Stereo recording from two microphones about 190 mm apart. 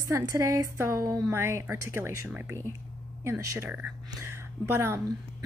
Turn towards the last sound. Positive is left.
turn(degrees=-15)  # may be behind; listen again after turning